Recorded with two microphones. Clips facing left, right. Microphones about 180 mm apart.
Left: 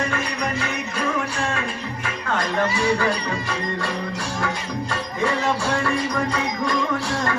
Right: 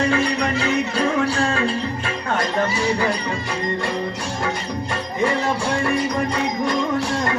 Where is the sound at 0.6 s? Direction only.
35° right (ahead or behind).